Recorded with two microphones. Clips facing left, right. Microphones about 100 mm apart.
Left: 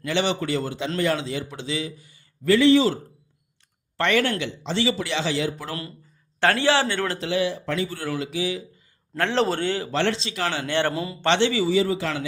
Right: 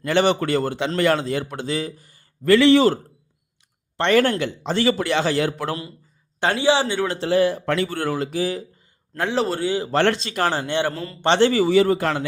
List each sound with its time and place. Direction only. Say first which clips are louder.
0.0 s a man's voice: right 5 dB; 50° right (ahead or behind)
2.6 s a man's voice: right 2 dB; 70° right (ahead or behind)
4.1 s a man's voice: right 6 dB; 45° right (ahead or behind)
5.5 s a man's voice: right 6 dB; 70° right (ahead or behind)
6.4 s a man's voice: right 1 dB; 15° right (ahead or behind)
7.2 s a man's voice: right 6 dB; 45° right (ahead or behind); by 8.1 s 60° right (ahead or behind)
8.2 s a man's voice: right 3 dB; 45° right (ahead or behind)
9.1 s a man's voice: right 1 dB; 15° right (ahead or behind)
9.4 s a man's voice: even; 5° right (ahead or behind)
9.9 s a man's voice: right 5 dB; 55° right (ahead or behind)
10.9 s a man's voice: left 3 dB; 10° left (ahead or behind)
11.3 s a man's voice: right 4 dB; 45° right (ahead or behind)